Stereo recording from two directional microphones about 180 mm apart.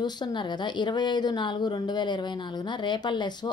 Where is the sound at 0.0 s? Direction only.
25° left (ahead or behind).